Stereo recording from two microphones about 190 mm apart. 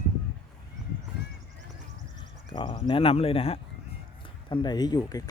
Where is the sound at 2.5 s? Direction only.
25° left (ahead or behind).